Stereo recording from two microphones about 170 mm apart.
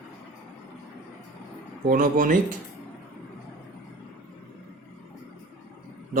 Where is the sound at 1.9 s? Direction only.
55° right (ahead or behind).